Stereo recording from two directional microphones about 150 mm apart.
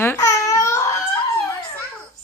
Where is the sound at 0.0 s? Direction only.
20° left (ahead or behind).